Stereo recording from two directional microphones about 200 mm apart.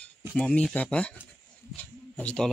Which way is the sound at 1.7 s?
5° left (ahead or behind).